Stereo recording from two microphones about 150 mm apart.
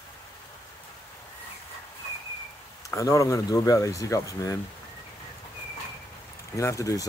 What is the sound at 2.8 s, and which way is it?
Speech, 20° left (ahead or behind).